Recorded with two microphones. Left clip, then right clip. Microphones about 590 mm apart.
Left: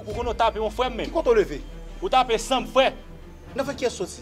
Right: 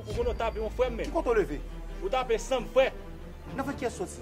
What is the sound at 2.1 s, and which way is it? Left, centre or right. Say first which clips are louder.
Speech: left 8 dB; left.